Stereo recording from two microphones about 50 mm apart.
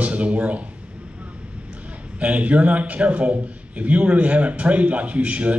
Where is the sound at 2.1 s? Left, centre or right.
Right.